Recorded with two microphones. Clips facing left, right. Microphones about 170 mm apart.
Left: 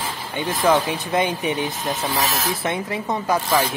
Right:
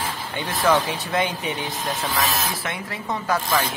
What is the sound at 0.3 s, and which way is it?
Speech, 15° left (ahead or behind).